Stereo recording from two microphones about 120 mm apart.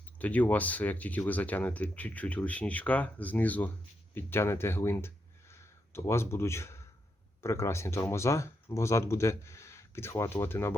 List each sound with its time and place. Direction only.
0.2 s speech: 15° left (ahead or behind)